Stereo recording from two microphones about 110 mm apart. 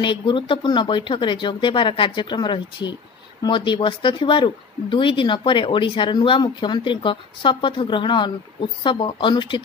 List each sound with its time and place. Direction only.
0.0 s speech: 50° left (ahead or behind)